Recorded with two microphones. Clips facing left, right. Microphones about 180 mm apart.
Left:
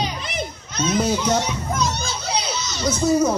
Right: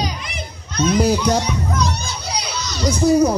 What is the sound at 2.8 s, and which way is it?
Speech, 15° right (ahead or behind).